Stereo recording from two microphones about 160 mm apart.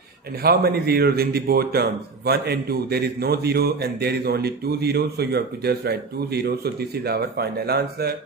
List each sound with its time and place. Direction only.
0.4 s a man's voice: 75° right (ahead or behind)